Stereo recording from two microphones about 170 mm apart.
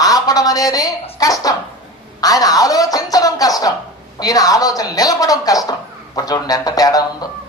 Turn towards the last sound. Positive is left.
turn(degrees=20)  # may be behind; listen again after turning